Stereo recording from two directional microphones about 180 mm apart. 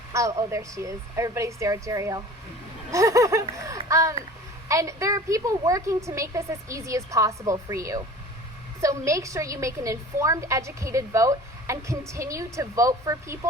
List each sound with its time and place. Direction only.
0.1 s a woman's voice: 15° right (ahead or behind)